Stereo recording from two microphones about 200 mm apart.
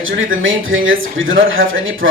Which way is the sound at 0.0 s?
75° right (ahead or behind).